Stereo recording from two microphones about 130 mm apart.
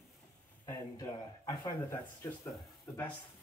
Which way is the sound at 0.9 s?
35° left (ahead or behind).